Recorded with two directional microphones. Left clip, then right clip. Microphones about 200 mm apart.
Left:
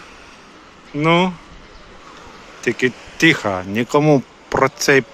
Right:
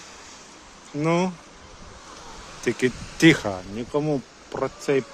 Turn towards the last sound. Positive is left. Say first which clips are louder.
# left 10 dB
turn(degrees=10)  # may be behind; listen again after turning